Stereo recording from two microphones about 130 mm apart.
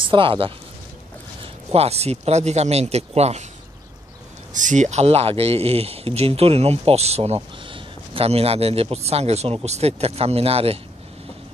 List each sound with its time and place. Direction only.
0.1 s speech: 45° right (ahead or behind)
4.6 s a man's voice: 70° right (ahead or behind); by 10.8 s 50° right (ahead or behind)